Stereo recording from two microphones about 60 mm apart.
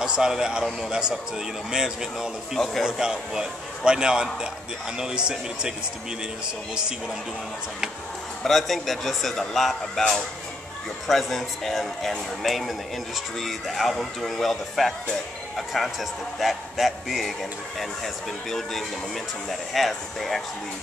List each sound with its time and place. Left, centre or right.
0.0 s a man's voice: centre
8.5 s speech: centre